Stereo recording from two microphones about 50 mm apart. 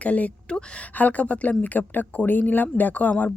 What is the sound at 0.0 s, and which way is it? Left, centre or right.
Speech, left.